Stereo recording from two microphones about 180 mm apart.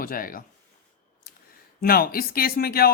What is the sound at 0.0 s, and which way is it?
Speech, 50° left (ahead or behind).